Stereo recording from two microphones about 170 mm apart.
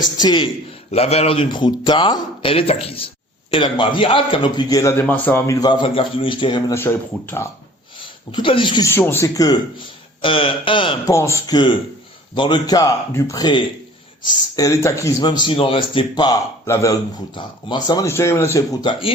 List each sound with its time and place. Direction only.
0.2 s a man's voice: 25° left (ahead or behind)
0.9 s a man's voice: 35° left (ahead or behind); by 7.4 s 15° left (ahead or behind)
8.3 s a man's voice: 30° left (ahead or behind)
8.9 s a man's voice: 15° left (ahead or behind); by 11.1 s 30° left (ahead or behind)
11.1 s a man's voice: 15° left (ahead or behind)